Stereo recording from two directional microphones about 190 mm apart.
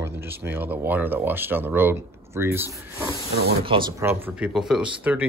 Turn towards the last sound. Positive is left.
turn(degrees=-10)  # may be behind; listen again after turning